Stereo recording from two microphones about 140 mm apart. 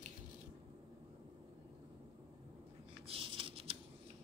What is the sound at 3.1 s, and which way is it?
Computer keyboard, 40° right (ahead or behind).